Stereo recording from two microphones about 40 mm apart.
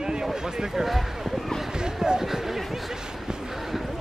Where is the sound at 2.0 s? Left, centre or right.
Centre.